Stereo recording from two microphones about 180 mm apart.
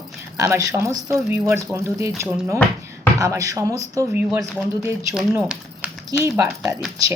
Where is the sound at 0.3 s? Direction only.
15° right (ahead or behind).